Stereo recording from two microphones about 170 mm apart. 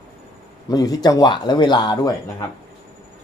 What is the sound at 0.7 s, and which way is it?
A man's voice, 20° left (ahead or behind).